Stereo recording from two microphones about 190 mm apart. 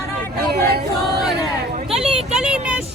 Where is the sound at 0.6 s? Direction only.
55° right (ahead or behind).